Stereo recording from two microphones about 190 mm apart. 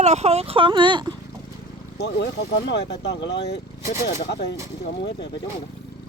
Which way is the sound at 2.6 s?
65° left (ahead or behind).